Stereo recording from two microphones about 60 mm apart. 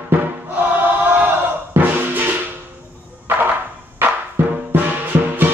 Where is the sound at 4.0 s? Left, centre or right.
Right.